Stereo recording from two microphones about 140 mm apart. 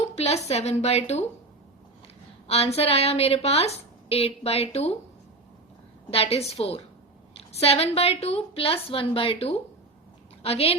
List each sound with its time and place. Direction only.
0.0 s a woman's voice: 50° left (ahead or behind)
2.5 s a woman's voice: 45° left (ahead or behind)
6.1 s a woman's voice: 45° left (ahead or behind)